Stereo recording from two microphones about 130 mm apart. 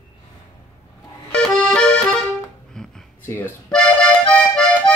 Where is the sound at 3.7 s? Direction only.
5° left (ahead or behind).